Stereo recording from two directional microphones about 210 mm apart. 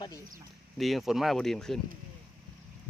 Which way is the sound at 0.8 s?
Centre (ahead or behind).